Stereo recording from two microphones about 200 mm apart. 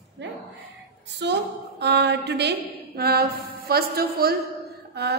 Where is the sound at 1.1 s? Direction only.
60° right (ahead or behind).